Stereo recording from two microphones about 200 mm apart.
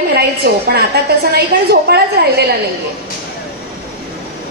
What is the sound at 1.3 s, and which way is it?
A woman's voice, 55° right (ahead or behind).